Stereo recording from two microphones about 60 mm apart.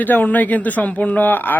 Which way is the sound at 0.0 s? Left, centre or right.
Left.